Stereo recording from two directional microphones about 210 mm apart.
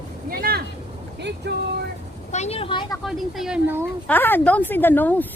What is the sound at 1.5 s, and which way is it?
Speech, 55° right (ahead or behind).